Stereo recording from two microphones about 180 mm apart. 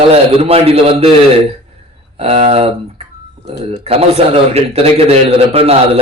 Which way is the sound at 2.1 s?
35° right (ahead or behind).